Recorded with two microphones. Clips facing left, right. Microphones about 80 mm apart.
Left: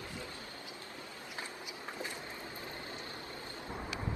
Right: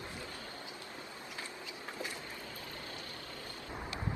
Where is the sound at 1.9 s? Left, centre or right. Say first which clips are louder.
Even; left.